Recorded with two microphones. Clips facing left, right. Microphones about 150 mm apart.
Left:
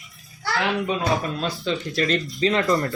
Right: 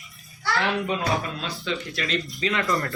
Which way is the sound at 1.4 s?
35° left (ahead or behind).